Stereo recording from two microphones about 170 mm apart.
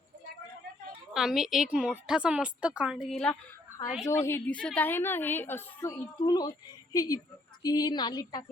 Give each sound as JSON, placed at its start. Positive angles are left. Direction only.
{"t": 1.1, "sound": "a woman's voice", "side_deg": 0}
{"t": 4.0, "sound": "a woman's voice", "side_deg": 15}